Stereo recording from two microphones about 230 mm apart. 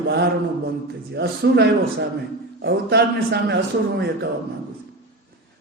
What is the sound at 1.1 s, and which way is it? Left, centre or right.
A man's voice, right.